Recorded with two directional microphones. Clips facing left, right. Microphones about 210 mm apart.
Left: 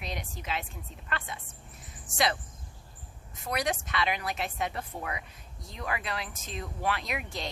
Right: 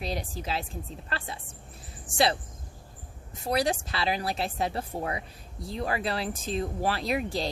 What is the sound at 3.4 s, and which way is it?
A woman's voice, 30° right (ahead or behind).